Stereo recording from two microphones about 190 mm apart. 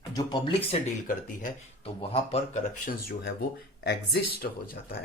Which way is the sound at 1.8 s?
30° left (ahead or behind).